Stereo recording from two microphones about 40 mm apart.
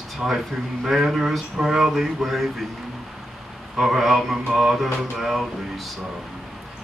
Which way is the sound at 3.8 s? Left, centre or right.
Centre.